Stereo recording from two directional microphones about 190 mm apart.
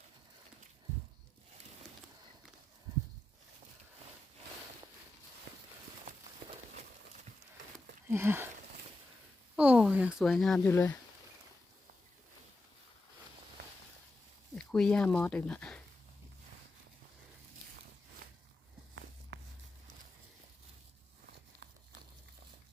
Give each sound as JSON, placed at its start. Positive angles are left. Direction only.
{"t": 8.1, "sound": "speech", "side_deg": -10}
{"t": 9.6, "sound": "speech", "side_deg": -10}
{"t": 10.7, "sound": "speech", "side_deg": 15}
{"t": 14.5, "sound": "speech", "side_deg": 5}
{"t": 19.3, "sound": "walk", "side_deg": -65}